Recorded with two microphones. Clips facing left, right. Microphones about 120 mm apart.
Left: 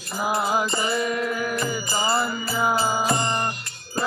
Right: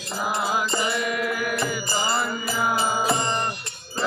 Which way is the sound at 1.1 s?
30° left (ahead or behind).